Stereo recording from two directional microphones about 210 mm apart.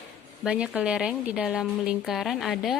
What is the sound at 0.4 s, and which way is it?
A woman's voice, 5° right (ahead or behind).